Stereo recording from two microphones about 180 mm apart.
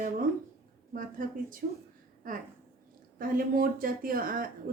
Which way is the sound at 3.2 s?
55° right (ahead or behind).